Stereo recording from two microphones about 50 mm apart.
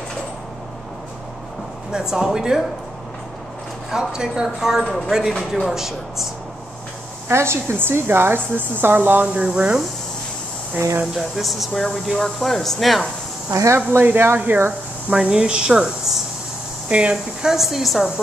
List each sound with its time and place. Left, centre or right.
1.9 s speech: centre
3.9 s speech: centre
7.2 s speech: right
7.7 s speech: right
9.3 s speech: centre
11.1 s speech: centre
13.5 s speech: right
13.7 s speech: right
15.1 s speech: centre
16.9 s speech: centre